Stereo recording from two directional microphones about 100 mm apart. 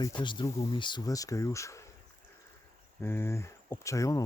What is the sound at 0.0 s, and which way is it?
Speech, 50° left (ahead or behind).